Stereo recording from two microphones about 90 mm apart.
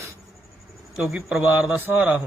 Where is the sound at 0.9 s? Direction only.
5° right (ahead or behind).